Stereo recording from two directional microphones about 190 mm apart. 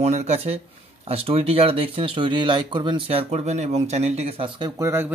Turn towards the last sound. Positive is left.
turn(degrees=-15)  # may be behind; listen again after turning